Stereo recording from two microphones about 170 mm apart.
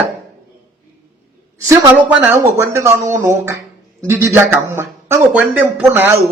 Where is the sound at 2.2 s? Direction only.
15° right (ahead or behind).